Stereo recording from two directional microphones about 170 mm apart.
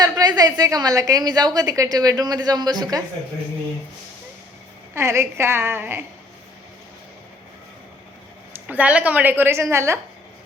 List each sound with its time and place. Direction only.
0.0 s a woman's voice: 20° right (ahead or behind)
4.9 s a woman's voice: 15° right (ahead or behind)
8.6 s a woman's voice: 10° right (ahead or behind)